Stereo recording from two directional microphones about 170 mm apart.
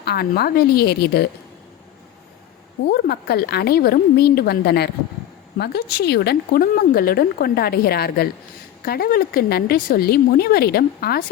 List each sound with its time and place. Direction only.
0.0 s a woman's voice: 70° left (ahead or behind)
2.9 s a woman's voice: 65° left (ahead or behind)